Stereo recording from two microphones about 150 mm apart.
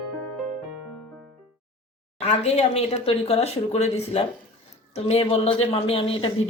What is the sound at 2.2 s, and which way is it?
A woman's voice, 45° left (ahead or behind).